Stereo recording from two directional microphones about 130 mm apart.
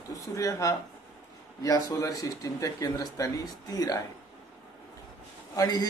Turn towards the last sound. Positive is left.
turn(degrees=30)  # may be behind; listen again after turning